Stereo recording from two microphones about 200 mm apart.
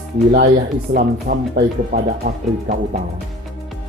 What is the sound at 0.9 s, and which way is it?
Speech, 45° right (ahead or behind).